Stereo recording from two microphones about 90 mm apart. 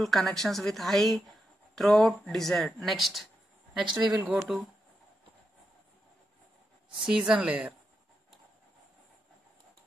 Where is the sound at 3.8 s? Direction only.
45° right (ahead or behind).